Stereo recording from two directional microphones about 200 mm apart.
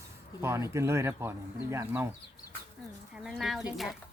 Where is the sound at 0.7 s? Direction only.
15° right (ahead or behind).